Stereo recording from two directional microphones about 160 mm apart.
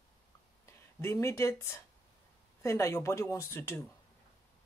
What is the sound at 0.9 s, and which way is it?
Speech, 15° left (ahead or behind).